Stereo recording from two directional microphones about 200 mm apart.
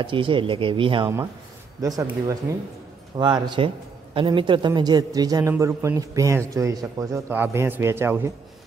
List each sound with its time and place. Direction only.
0.0 s a man's voice: 25° right (ahead or behind)